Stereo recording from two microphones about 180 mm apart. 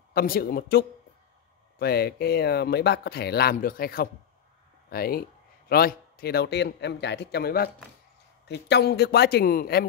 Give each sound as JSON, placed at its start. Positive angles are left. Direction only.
{"t": 0.1, "sound": "speech", "side_deg": 55}